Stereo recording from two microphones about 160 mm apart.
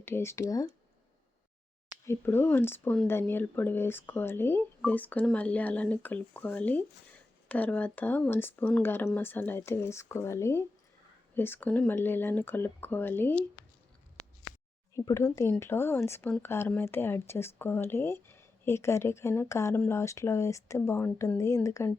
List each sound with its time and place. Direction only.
0.0 s speech: 15° left (ahead or behind)
2.0 s speech: 15° left (ahead or behind)
14.9 s speech: 20° left (ahead or behind)